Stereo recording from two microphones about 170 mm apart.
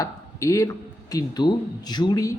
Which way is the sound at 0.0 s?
20° left (ahead or behind).